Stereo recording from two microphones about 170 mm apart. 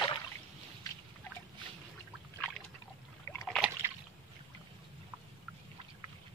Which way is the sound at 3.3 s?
15° left (ahead or behind).